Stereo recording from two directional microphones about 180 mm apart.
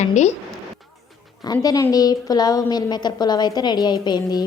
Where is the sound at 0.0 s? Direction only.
40° left (ahead or behind).